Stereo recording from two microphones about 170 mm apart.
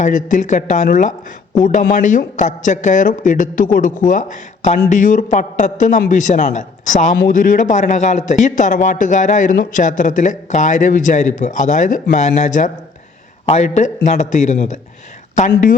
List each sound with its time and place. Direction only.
0.0 s a man's voice: 50° left (ahead or behind)